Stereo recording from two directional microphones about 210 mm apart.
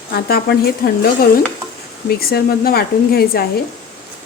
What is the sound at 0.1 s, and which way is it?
Speech, 50° left (ahead or behind).